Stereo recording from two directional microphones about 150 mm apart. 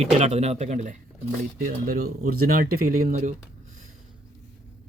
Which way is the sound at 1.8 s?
90° right.